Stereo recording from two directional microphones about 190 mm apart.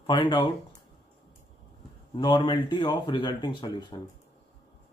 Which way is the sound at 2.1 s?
30° left (ahead or behind).